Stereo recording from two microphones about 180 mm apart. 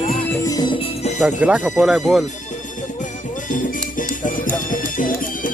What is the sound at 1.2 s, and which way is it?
Speech, 5° right (ahead or behind).